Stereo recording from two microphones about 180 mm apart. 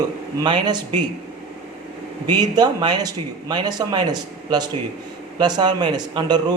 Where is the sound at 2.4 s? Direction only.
25° right (ahead or behind).